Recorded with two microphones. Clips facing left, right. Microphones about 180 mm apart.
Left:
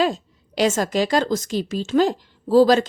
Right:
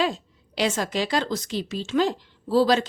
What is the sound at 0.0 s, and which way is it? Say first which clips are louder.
A woman's voice: left 4 dB; 45° left (ahead or behind).